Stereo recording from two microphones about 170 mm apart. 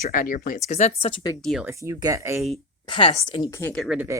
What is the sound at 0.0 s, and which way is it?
Speech, 55° left (ahead or behind).